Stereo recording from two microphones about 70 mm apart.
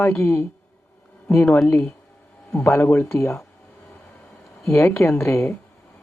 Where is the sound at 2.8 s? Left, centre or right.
Left.